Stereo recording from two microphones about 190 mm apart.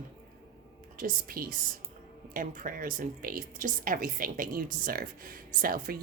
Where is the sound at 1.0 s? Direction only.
50° right (ahead or behind).